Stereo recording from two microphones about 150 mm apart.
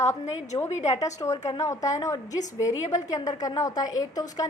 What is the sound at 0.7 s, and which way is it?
Speech, 50° left (ahead or behind).